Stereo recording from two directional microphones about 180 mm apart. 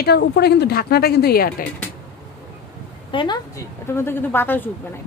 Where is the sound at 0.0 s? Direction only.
65° left (ahead or behind).